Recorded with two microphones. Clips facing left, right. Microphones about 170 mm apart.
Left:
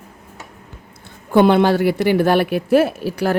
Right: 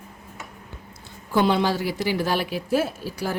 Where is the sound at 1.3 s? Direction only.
60° left (ahead or behind).